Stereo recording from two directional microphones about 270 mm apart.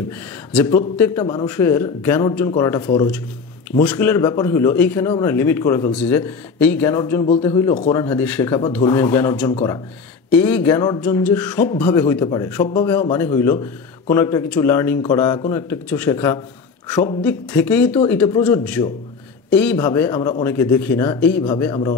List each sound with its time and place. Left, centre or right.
0.5 s a man's voice: centre
3.8 s a man's voice: centre
9.5 s speech: left
10.3 s a man's voice: centre